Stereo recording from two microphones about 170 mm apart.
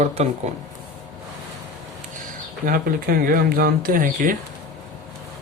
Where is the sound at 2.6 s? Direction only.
60° right (ahead or behind).